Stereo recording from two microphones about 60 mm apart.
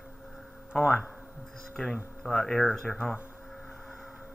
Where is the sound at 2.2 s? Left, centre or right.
Centre.